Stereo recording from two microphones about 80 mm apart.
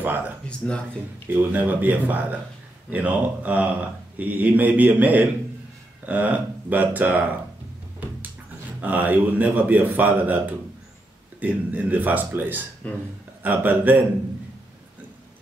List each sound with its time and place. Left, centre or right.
0.0 s speech: right
0.5 s speech: centre
1.3 s speech: right
8.8 s speech: centre
12.8 s speech: centre
13.4 s speech: right